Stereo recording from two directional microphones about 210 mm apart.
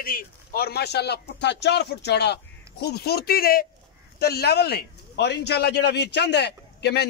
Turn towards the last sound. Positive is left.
turn(degrees=50)  # may be behind; listen again after turning